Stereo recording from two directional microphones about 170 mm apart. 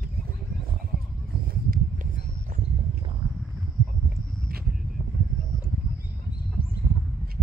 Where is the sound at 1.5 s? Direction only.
55° right (ahead or behind).